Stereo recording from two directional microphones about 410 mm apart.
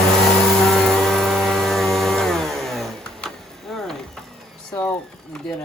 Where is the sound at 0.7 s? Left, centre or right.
Centre.